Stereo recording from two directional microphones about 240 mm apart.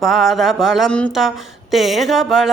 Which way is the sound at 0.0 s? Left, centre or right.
Centre.